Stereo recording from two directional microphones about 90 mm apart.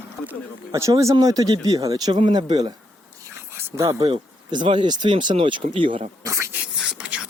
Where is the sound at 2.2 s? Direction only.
65° right (ahead or behind).